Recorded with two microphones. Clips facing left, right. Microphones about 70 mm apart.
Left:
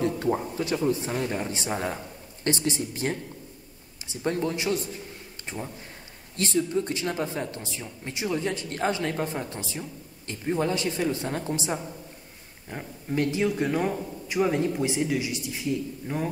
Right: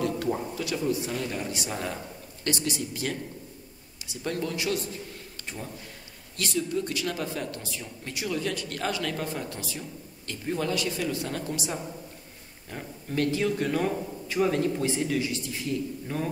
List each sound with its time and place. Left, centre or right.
0.6 s speech: left
6.3 s a man's voice: left